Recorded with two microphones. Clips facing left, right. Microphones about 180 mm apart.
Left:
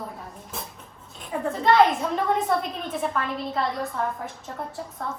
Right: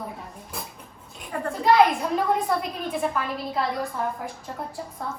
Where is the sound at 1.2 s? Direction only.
Centre (ahead or behind).